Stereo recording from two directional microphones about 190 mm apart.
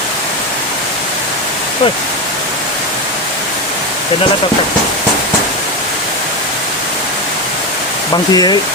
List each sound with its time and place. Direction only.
8.1 s speech: 20° left (ahead or behind)